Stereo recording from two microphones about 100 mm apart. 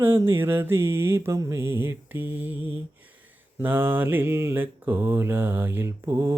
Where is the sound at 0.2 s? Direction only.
25° right (ahead or behind).